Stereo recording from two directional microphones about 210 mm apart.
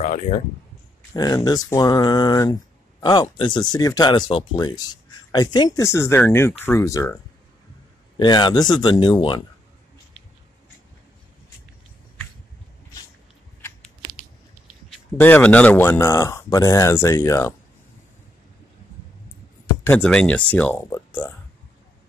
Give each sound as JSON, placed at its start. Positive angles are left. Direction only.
{"t": 0.0, "sound": "a sound", "side_deg": 35}
{"t": 1.1, "sound": "speech", "side_deg": 20}
{"t": 8.2, "sound": "speech", "side_deg": 20}
{"t": 15.1, "sound": "speech", "side_deg": 10}
{"t": 19.6, "sound": "speech", "side_deg": 10}